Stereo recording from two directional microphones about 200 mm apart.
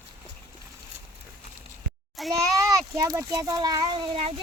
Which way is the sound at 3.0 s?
15° right (ahead or behind).